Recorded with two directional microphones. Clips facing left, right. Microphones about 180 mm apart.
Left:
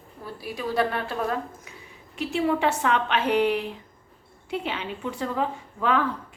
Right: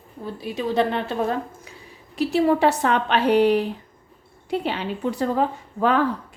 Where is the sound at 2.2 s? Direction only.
40° right (ahead or behind).